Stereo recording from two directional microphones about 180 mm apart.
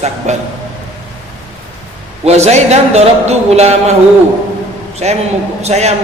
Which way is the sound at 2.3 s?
35° right (ahead or behind).